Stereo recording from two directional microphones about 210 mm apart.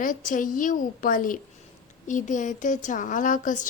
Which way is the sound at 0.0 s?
40° left (ahead or behind).